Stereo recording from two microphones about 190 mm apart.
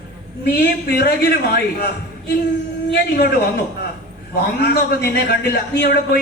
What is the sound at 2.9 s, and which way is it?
A man's voice, 55° left (ahead or behind).